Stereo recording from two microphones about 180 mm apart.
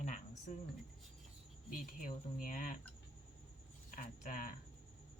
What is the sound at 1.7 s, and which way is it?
Speech, 50° left (ahead or behind).